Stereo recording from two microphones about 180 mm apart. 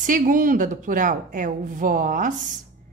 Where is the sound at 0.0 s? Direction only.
50° right (ahead or behind).